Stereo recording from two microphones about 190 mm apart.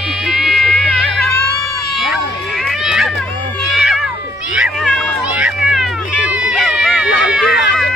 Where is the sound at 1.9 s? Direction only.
Centre (ahead or behind).